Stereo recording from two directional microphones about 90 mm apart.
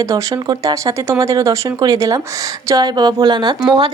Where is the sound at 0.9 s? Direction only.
35° right (ahead or behind); by 3.6 s 55° right (ahead or behind).